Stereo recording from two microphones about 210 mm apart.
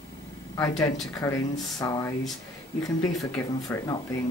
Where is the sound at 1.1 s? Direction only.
15° left (ahead or behind).